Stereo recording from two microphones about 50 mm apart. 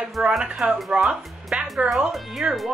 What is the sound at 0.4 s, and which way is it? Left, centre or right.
Speech, centre.